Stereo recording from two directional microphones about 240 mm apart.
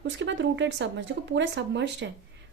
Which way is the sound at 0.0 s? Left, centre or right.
Right.